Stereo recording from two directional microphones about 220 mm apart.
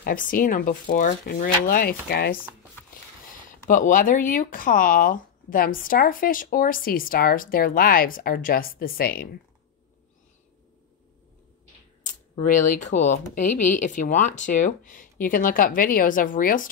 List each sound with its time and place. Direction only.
0.0 s speech: 40° left (ahead or behind)
12.6 s speech: 35° left (ahead or behind)